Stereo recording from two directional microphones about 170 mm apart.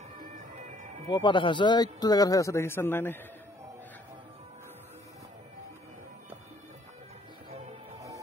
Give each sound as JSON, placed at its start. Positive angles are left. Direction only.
{"t": 1.1, "sound": "a man's voice", "side_deg": 30}